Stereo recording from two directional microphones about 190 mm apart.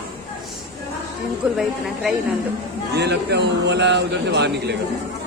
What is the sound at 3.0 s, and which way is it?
A man's voice, 65° right (ahead or behind).